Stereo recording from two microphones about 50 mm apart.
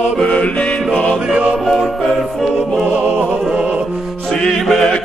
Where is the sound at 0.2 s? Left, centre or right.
Left.